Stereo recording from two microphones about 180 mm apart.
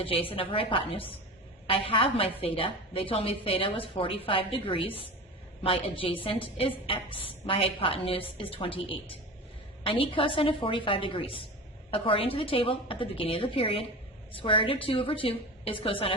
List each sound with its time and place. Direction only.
0.0 s a woman's voice: 30° left (ahead or behind)